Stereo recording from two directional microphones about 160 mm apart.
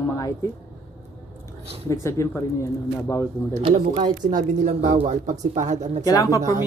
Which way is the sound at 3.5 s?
45° right (ahead or behind).